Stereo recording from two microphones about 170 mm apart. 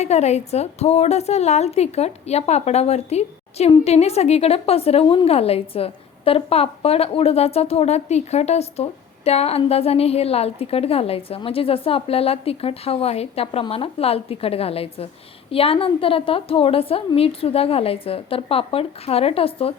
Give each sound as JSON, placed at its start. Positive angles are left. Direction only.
{"t": 0.0, "sound": "a woman's voice", "side_deg": 40}